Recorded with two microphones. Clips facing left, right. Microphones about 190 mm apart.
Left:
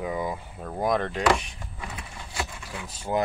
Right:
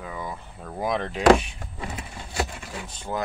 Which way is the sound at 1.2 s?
40° right (ahead or behind).